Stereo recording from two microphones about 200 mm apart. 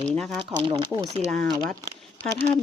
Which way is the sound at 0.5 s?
25° right (ahead or behind).